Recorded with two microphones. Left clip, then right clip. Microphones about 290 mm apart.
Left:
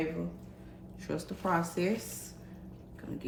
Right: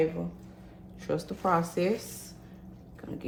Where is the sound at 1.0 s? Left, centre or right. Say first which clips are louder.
Right 5 dB; right.